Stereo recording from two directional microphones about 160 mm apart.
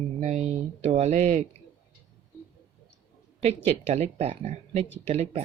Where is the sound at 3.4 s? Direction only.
40° right (ahead or behind).